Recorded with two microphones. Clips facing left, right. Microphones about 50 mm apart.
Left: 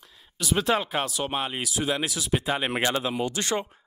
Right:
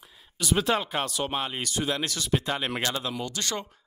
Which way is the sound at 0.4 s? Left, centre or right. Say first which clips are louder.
Left 1 dB; centre.